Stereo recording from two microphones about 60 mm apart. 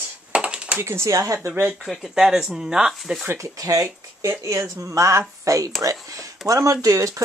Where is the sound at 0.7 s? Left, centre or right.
Right.